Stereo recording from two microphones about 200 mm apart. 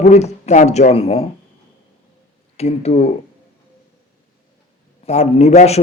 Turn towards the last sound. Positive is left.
turn(degrees=35)  # may be behind; listen again after turning